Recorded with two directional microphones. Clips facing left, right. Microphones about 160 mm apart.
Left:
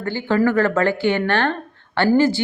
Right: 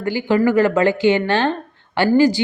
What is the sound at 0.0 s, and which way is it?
Speech, 15° right (ahead or behind).